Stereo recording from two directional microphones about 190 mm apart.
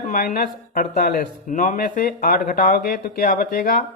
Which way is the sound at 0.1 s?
45° left (ahead or behind).